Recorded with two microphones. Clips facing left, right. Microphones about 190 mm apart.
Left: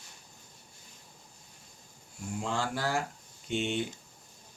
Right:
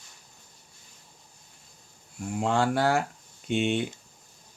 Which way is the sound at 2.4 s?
65° right (ahead or behind).